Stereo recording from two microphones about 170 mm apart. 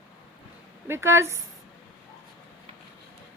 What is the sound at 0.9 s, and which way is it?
Speech, 15° right (ahead or behind).